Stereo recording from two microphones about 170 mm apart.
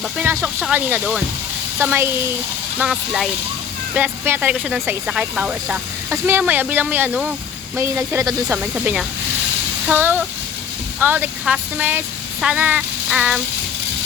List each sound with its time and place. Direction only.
0.2 s speech: 10° right (ahead or behind)
8.4 s speech: 5° right (ahead or behind)